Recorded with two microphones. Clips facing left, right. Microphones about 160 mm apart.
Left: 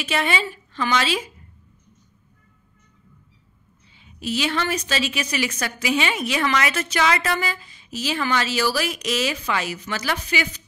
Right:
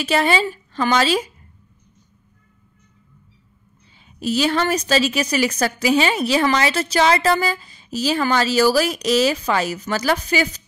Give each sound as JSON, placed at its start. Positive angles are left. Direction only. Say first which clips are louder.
{"t": 0.0, "sound": "a woman's voice", "louder": "right 5 dB", "side_deg": -35}
{"t": 4.0, "sound": "a woman's voice", "louder": "right 5 dB", "side_deg": -40}